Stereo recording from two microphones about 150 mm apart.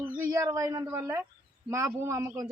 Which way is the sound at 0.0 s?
15° right (ahead or behind).